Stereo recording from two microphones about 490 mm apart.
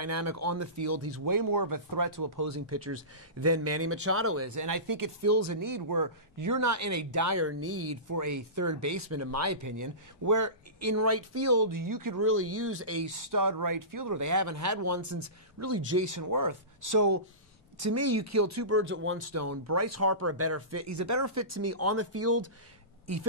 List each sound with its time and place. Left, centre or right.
0.0 s speech: right
12.2 s speech: right